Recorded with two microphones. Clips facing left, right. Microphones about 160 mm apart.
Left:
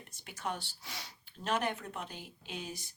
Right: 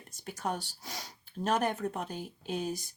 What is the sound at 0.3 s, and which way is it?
Speech, 40° right (ahead or behind).